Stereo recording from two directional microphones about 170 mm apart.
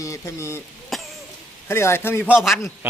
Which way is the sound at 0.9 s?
Centre (ahead or behind).